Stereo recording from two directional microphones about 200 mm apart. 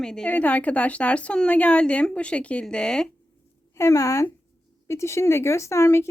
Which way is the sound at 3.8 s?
15° left (ahead or behind).